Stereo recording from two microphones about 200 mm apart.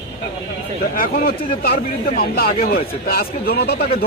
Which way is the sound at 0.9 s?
45° left (ahead or behind).